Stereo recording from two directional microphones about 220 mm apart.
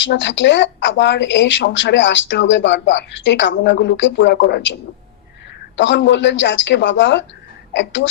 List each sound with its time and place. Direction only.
0.0 s speech: 55° left (ahead or behind)